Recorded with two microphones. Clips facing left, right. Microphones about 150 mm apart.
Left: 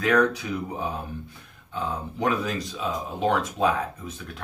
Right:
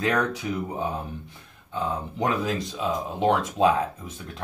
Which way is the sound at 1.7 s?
20° right (ahead or behind).